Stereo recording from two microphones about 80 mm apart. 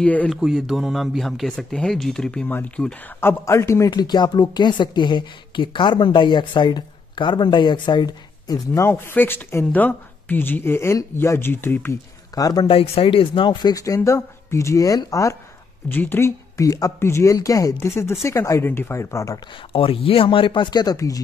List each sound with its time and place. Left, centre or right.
0.0 s speech: centre
0.3 s a man's voice: centre
2.4 s speech: centre
3.2 s speech: left
3.9 s speech: left
8.7 s speech: left
12.4 s speech: left
12.6 s speech: left
15.9 s speech: left
16.3 s speech: left
19.7 s speech: left
20.9 s speech: left